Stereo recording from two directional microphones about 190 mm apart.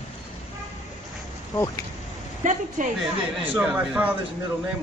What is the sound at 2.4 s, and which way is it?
Speech, 40° right (ahead or behind).